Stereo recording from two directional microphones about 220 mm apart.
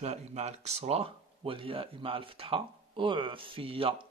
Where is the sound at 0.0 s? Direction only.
30° right (ahead or behind).